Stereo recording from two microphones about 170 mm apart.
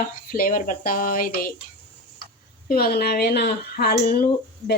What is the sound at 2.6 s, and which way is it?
Speech, 60° left (ahead or behind).